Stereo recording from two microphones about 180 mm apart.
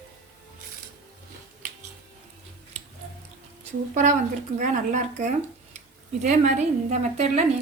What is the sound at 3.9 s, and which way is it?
A woman's voice, 45° right (ahead or behind).